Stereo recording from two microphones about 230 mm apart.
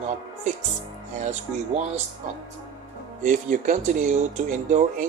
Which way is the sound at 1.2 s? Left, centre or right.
Right.